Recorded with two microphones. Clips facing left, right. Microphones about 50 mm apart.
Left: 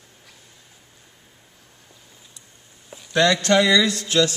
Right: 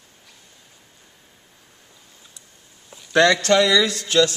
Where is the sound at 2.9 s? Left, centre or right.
Centre.